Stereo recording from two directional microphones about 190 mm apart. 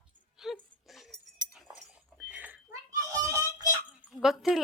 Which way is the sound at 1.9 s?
5° right (ahead or behind).